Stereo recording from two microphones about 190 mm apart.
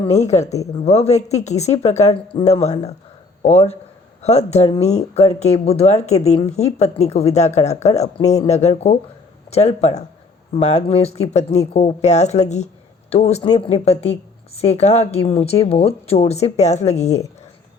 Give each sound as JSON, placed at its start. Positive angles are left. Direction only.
{"t": 0.0, "sound": "speech", "side_deg": 35}